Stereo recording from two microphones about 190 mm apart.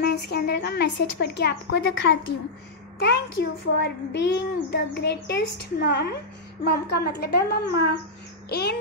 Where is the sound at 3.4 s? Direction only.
60° left (ahead or behind).